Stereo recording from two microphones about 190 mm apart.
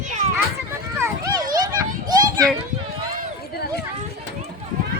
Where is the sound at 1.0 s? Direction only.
20° right (ahead or behind).